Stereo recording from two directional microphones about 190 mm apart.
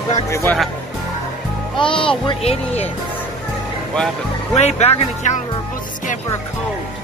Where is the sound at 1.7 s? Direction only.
25° left (ahead or behind).